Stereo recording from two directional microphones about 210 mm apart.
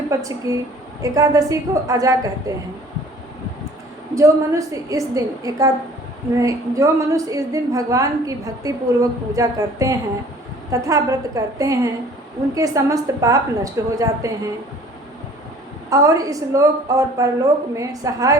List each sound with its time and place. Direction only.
0.1 s a woman's voice: 15° right (ahead or behind)
4.1 s a woman's voice: 15° right (ahead or behind)
15.9 s a woman's voice: 15° right (ahead or behind)